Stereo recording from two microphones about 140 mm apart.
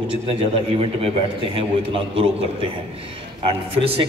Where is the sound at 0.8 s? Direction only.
40° right (ahead or behind).